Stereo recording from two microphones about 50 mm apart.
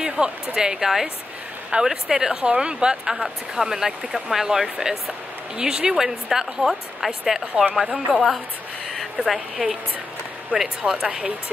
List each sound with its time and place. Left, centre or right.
0.0 s a sound: centre
0.6 s a woman's voice: centre
10.5 s speech: right
10.9 s speech: centre